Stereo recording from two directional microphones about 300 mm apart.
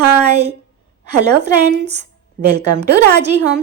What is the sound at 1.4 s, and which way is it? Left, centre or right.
A woman's voice, right.